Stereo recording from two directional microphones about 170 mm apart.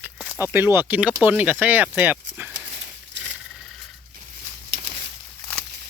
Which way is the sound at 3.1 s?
90° right.